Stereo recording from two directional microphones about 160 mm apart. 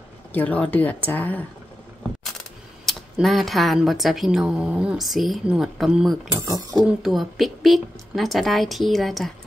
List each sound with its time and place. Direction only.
0.3 s speech: 10° left (ahead or behind)
2.8 s speech: centre (ahead or behind)
6.4 s speech: 20° right (ahead or behind)
6.8 s speech: centre (ahead or behind)